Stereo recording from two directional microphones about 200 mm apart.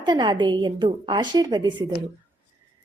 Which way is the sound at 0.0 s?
20° right (ahead or behind).